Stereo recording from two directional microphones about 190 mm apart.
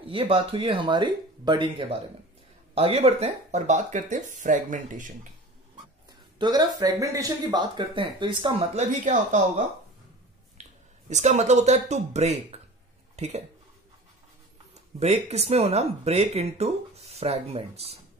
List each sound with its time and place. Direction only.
0.0 s speech: 30° right (ahead or behind)
6.3 s speech: 20° right (ahead or behind); by 9.4 s 40° right (ahead or behind)
10.6 s a sound: 35° right (ahead or behind)
11.1 s speech: 35° right (ahead or behind)
14.7 s speech: 35° right (ahead or behind)